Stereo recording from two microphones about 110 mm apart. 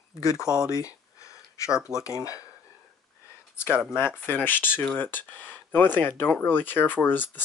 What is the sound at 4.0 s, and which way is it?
Speech, 20° left (ahead or behind).